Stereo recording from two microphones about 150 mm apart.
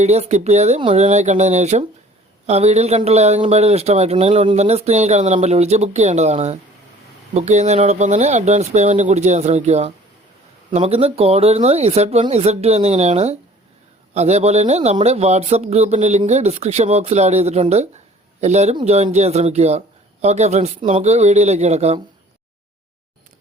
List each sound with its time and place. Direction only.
0.0 s a man's voice: 45° right (ahead or behind)